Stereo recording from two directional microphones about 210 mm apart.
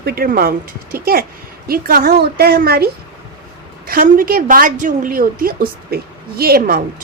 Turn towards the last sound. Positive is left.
turn(degrees=-45)  # may be behind; listen again after turning